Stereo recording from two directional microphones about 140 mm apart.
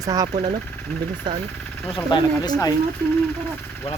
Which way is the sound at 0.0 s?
25° right (ahead or behind).